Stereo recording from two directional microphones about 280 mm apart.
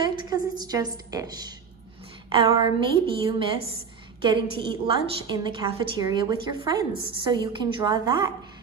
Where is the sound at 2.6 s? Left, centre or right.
Centre.